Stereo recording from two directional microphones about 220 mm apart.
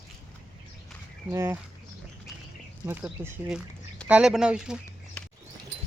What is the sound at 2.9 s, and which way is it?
Speech, 10° right (ahead or behind).